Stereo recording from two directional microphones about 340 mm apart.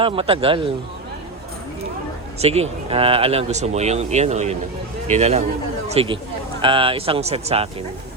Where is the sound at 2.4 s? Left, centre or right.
Centre.